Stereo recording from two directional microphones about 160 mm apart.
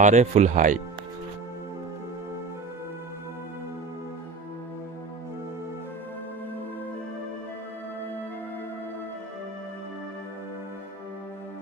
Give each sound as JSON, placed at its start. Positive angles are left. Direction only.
{"t": 0.0, "sound": "speech", "side_deg": -45}